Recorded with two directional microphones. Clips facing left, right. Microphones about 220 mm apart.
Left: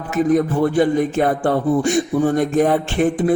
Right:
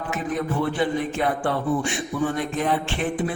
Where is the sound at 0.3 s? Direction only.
45° left (ahead or behind).